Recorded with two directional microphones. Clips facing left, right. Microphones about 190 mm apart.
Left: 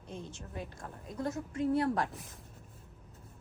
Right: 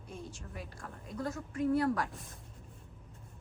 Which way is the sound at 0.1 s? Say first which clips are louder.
Left 2 dB; 20° left (ahead or behind).